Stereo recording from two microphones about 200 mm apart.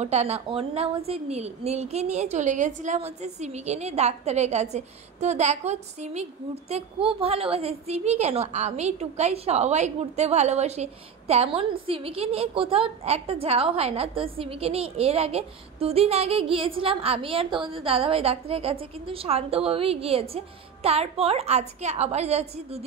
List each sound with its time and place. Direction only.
0.0 s a woman's voice: 30° right (ahead or behind)